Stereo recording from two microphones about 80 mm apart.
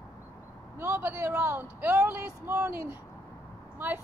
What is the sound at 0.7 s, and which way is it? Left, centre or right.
Vehicle, right.